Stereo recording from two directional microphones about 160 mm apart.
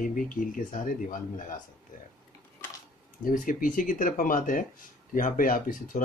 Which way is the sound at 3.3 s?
55° left (ahead or behind).